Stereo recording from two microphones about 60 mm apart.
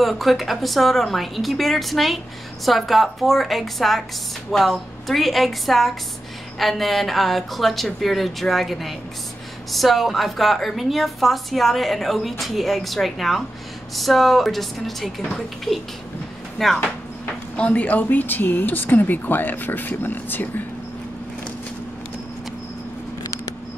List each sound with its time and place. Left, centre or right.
0.0 s a woman's voice: centre
17.6 s speech: left